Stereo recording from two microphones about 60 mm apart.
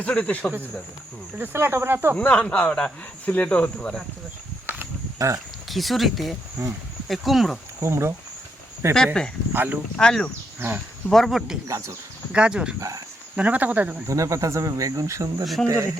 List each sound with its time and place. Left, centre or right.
0.0 s speech: left
1.4 s speech: right
2.1 s speech: left
3.2 s speech: left
5.2 s speech: right
5.6 s speech: centre
6.6 s speech: right
7.1 s speech: centre
7.8 s speech: right
9.5 s speech: right
10.0 s speech: centre
11.1 s speech: centre
12.3 s speech: centre
14.1 s speech: right